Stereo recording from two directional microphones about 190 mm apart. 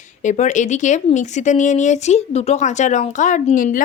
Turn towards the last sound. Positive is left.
turn(degrees=40)  # may be behind; listen again after turning